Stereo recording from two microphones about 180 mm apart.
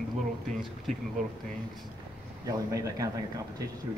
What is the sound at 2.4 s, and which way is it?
A man's voice, 20° right (ahead or behind).